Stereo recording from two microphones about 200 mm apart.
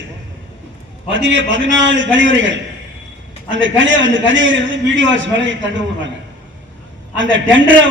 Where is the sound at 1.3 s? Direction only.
70° right (ahead or behind).